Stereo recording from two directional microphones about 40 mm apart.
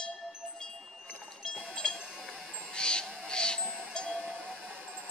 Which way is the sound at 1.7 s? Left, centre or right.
Left.